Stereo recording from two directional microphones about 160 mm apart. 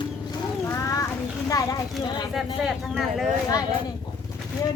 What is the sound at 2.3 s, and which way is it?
Speech, centre (ahead or behind).